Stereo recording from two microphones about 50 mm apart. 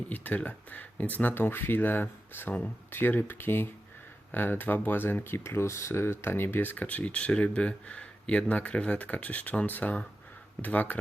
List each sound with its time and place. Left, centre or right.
0.1 s speech: left